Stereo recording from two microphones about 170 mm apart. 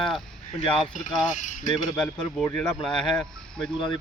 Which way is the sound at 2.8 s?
5° left (ahead or behind).